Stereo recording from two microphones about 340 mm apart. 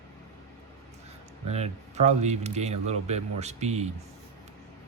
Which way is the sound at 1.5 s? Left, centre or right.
Centre.